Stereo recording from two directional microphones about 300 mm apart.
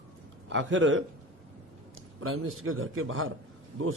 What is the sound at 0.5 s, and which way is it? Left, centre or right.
Speech, right.